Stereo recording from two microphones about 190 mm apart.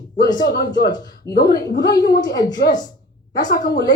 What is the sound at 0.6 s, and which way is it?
A woman's voice, 20° left (ahead or behind).